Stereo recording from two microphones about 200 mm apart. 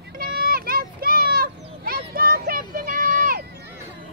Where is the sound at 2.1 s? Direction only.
45° right (ahead or behind).